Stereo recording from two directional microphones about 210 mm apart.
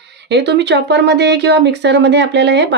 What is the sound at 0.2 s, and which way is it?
Speech, 55° right (ahead or behind).